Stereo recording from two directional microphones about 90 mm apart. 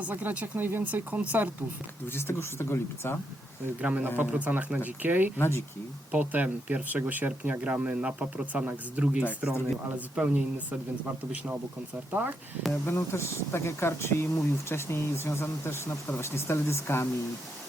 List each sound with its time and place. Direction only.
0.1 s speech: 20° right (ahead or behind)
2.0 s speech: 25° left (ahead or behind)
3.8 s speech: 15° right (ahead or behind)
5.4 s speech: 30° left (ahead or behind)
6.1 s speech: 15° right (ahead or behind)
12.8 s speech: 25° left (ahead or behind)